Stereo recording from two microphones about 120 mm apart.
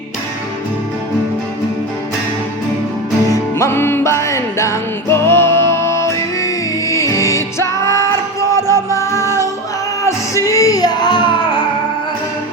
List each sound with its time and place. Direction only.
3.6 s music: 20° left (ahead or behind); by 11.6 s 40° left (ahead or behind)